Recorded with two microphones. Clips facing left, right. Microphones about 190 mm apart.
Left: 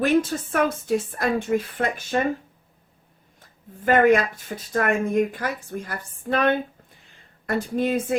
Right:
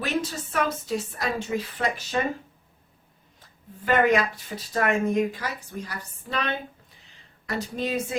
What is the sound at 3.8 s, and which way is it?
Speech, 50° left (ahead or behind).